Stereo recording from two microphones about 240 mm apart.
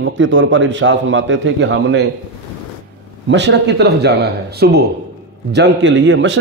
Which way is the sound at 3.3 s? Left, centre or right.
Right.